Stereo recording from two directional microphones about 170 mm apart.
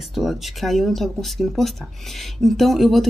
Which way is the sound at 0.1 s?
Centre (ahead or behind).